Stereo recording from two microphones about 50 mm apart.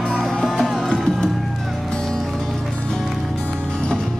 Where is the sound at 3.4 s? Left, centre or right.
Centre.